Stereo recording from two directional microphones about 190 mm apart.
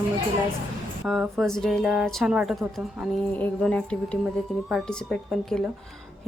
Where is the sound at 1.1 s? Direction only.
Centre (ahead or behind).